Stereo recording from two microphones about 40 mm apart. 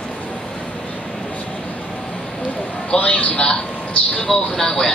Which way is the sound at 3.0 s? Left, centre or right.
Left.